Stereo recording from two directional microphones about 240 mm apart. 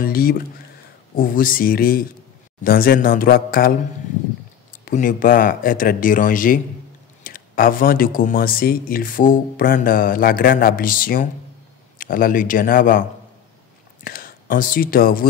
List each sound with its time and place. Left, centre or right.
0.0 s speech: left
4.8 s speech: left
14.0 s speech: left